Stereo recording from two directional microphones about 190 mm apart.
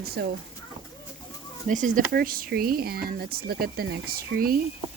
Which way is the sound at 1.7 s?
40° right (ahead or behind).